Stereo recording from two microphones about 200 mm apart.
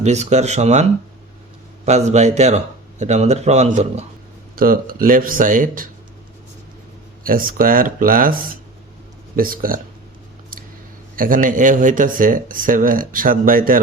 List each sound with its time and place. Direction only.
0.0 s a man's voice: 35° right (ahead or behind)
4.5 s speech: 45° right (ahead or behind)
7.3 s speech: 45° right (ahead or behind)
11.2 s speech: 45° right (ahead or behind)